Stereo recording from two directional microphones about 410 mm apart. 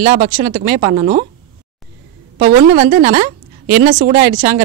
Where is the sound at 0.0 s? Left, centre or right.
Right.